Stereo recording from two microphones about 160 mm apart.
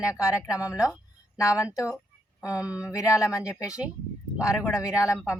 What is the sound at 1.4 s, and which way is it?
Speech, 20° left (ahead or behind).